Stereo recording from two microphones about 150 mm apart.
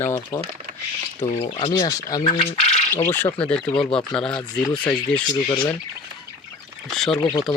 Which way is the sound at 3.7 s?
35° left (ahead or behind).